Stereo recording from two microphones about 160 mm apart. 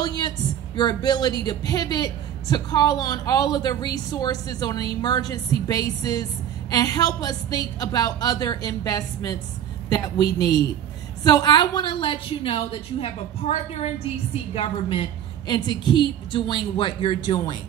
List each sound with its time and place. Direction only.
0.0 s a sound: 25° left (ahead or behind)
0.7 s a man's voice: 25° left (ahead or behind)
11.2 s a woman's voice: 25° left (ahead or behind)